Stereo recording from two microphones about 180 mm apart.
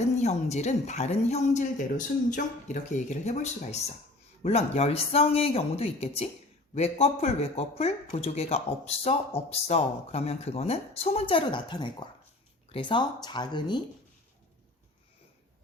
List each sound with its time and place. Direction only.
0.2 s speech: 40° left (ahead or behind)